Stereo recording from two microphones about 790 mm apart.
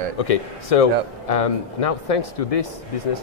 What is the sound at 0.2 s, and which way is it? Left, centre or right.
Speech, left.